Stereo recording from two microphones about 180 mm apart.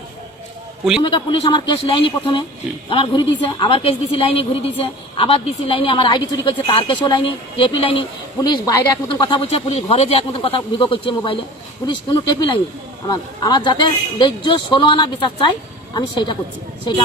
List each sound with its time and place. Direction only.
1.0 s a woman's voice: 30° left (ahead or behind)